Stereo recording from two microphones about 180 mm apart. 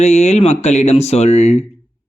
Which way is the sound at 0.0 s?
40° left (ahead or behind).